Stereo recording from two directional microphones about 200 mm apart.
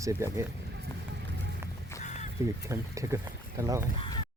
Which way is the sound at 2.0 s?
35° left (ahead or behind).